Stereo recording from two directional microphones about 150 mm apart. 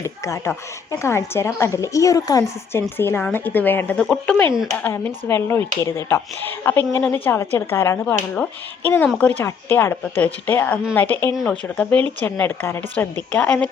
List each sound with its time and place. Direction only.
0.0 s a woman's voice: 20° left (ahead or behind); by 4.8 s centre (ahead or behind)
4.8 s speech: 15° left (ahead or behind)